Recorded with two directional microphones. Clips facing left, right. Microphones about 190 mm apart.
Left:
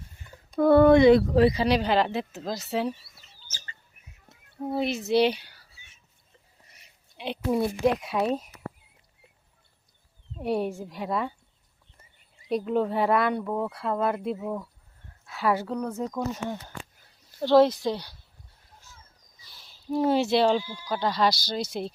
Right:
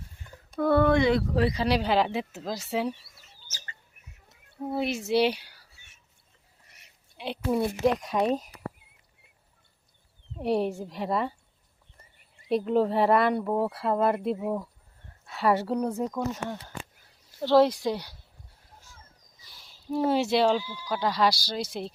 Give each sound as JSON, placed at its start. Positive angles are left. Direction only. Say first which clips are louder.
{"t": 0.5, "sound": "speech", "louder": "left 5 dB", "side_deg": 20}
{"t": 1.5, "sound": "speech", "louder": "left 1 dB", "side_deg": -5}
{"t": 4.8, "sound": "speech", "louder": "left 2 dB", "side_deg": -10}
{"t": 7.2, "sound": "speech", "louder": "left 1 dB", "side_deg": 0}
{"t": 10.4, "sound": "speech", "louder": "right 1 dB", "side_deg": 0}
{"t": 12.5, "sound": "speech", "louder": "right 2 dB", "side_deg": 0}
{"t": 15.8, "sound": "speech", "louder": "right 2 dB", "side_deg": -15}
{"t": 16.0, "sound": "speech", "louder": "even", "side_deg": 0}
{"t": 17.4, "sound": "speech", "louder": "left 2 dB", "side_deg": -5}
{"t": 20.1, "sound": "speech", "louder": "left 1 dB", "side_deg": -5}